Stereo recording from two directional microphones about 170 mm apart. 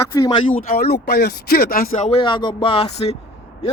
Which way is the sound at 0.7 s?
65° left (ahead or behind).